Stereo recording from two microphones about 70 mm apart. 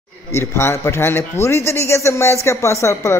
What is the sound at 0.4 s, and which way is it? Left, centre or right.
A man's voice, left.